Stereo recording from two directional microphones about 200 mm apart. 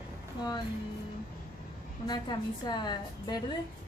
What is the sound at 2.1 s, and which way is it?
A woman's voice, 20° left (ahead or behind).